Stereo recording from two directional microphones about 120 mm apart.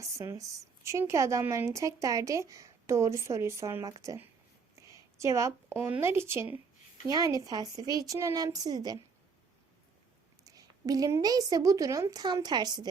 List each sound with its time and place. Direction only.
0.0 s a woman's voice: 25° right (ahead or behind)
5.1 s a woman's voice: 25° right (ahead or behind)
10.4 s a woman's voice: 30° right (ahead or behind)